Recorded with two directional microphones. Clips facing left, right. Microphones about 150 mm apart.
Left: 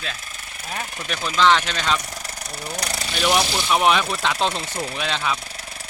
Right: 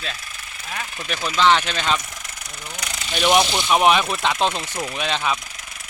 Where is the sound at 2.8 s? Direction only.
35° left (ahead or behind).